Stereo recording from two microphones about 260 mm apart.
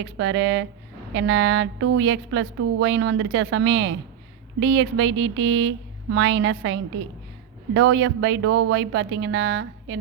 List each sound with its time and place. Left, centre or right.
0.0 s a woman's voice: right